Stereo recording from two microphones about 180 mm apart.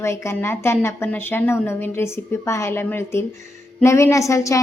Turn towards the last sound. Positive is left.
turn(degrees=15)  # may be behind; listen again after turning